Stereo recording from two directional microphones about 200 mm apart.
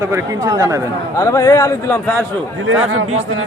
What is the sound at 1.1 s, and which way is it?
A man's voice, 15° left (ahead or behind).